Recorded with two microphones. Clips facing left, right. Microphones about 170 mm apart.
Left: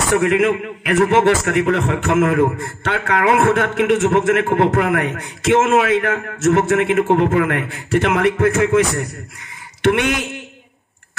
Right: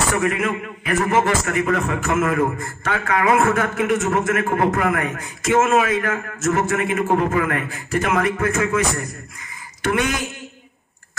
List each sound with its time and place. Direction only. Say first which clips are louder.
0.1 s a man's voice: left 6 dB; 70° left (ahead or behind)